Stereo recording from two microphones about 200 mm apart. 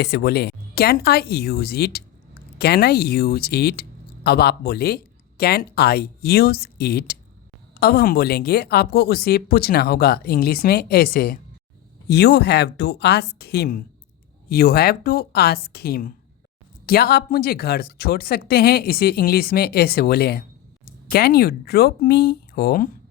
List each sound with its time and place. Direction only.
0.0 s speech: 55° left (ahead or behind)